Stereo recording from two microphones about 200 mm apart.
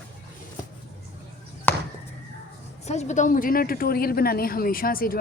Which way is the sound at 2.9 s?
35° left (ahead or behind).